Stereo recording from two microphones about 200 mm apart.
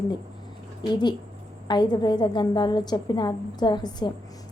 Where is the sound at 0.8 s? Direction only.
20° left (ahead or behind).